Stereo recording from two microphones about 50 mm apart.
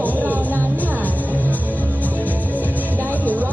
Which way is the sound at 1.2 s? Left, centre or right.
Right.